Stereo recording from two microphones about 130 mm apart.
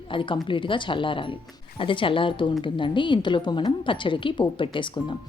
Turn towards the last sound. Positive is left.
turn(degrees=40)  # may be behind; listen again after turning